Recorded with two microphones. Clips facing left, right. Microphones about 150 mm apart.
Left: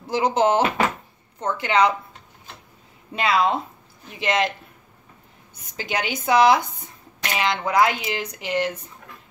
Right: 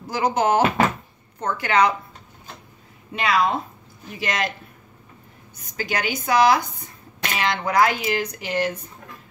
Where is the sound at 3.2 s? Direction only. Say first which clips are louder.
Left 1 dB; 25° left (ahead or behind).